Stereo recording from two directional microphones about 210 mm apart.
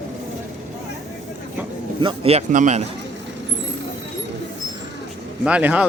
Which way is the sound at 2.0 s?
25° right (ahead or behind).